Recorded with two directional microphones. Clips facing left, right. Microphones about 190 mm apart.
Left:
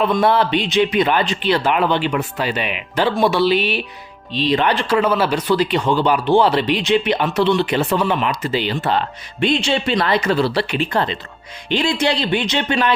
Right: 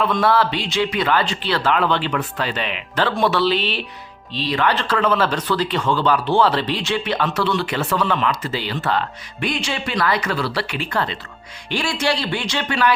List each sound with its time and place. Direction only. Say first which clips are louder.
0.1 s speech: left 2 dB; 20° left (ahead or behind)